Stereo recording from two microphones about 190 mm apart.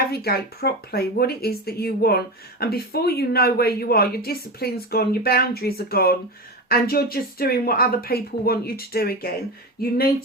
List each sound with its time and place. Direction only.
0.1 s speech: 55° left (ahead or behind)